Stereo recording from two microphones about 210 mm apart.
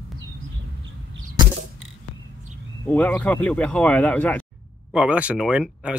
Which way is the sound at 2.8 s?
5° left (ahead or behind).